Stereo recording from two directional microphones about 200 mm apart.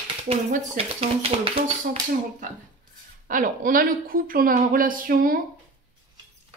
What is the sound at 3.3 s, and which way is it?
Speech, 40° right (ahead or behind).